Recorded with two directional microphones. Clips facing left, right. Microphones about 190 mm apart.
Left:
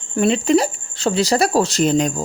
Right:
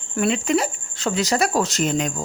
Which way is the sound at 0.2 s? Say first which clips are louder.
Left 5 dB; 30° left (ahead or behind).